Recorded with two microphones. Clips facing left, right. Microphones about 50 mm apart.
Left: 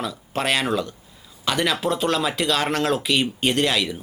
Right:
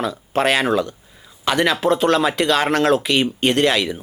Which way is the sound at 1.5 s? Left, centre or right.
Centre.